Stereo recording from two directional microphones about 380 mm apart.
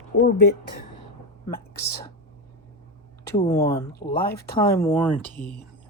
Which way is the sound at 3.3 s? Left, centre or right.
Centre.